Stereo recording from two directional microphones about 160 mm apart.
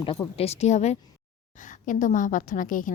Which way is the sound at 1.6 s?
55° left (ahead or behind).